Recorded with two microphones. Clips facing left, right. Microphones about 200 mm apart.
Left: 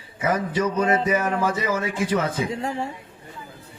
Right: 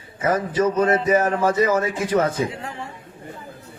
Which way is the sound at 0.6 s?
40° right (ahead or behind).